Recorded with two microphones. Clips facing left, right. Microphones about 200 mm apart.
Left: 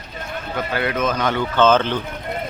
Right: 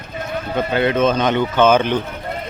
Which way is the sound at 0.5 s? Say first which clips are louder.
Right 5 dB; 25° right (ahead or behind).